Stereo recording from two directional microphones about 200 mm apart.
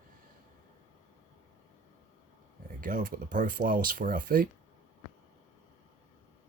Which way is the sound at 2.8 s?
40° right (ahead or behind).